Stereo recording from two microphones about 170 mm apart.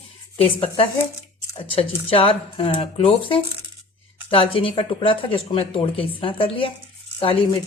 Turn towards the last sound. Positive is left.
turn(degrees=30)  # may be behind; listen again after turning